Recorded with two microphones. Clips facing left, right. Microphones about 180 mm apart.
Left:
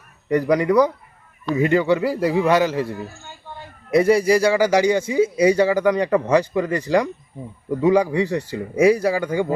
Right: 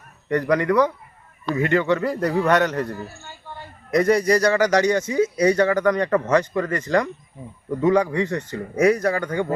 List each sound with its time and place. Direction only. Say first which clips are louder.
0.3 s a man's voice: left 2 dB; 10° left (ahead or behind)
4.9 s speech: left 2 dB; 30° left (ahead or behind)
5.4 s a man's voice: left 2 dB; 10° left (ahead or behind)